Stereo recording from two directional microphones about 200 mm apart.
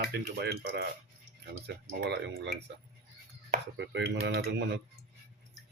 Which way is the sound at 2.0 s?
55° right (ahead or behind).